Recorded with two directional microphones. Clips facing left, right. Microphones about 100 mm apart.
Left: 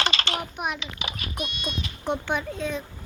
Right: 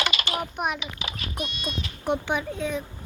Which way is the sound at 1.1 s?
20° left (ahead or behind).